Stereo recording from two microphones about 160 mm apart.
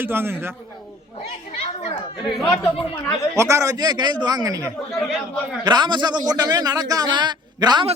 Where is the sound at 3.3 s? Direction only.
20° right (ahead or behind).